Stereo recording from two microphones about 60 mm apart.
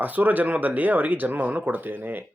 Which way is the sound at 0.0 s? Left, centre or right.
Right.